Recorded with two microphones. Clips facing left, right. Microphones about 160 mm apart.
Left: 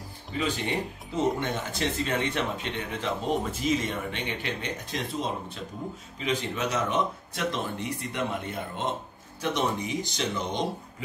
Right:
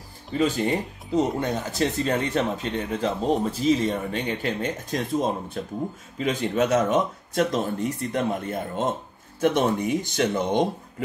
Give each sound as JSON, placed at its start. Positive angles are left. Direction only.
{"t": 0.4, "sound": "speech", "side_deg": -40}
{"t": 9.4, "sound": "speech", "side_deg": -50}